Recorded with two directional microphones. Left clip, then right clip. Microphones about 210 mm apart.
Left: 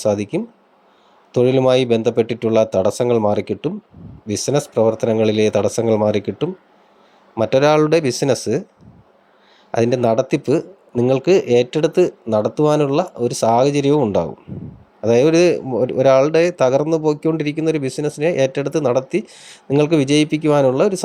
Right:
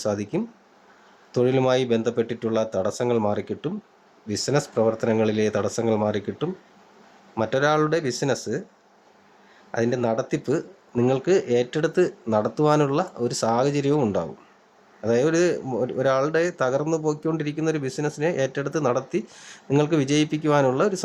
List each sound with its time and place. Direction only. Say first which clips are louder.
0.0 s speech: left 7 dB; 20° left (ahead or behind)
9.7 s speech: left 8 dB; 25° left (ahead or behind)